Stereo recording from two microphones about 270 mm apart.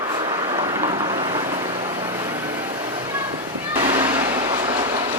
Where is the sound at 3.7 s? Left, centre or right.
Centre.